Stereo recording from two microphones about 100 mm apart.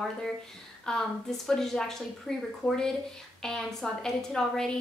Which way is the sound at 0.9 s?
5° left (ahead or behind).